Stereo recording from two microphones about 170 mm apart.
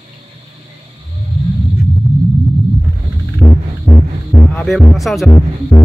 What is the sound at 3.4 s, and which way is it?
Music, 5° left (ahead or behind).